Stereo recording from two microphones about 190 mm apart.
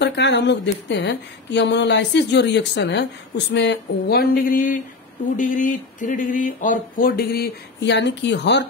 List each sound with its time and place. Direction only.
0.0 s speech: 65° left (ahead or behind)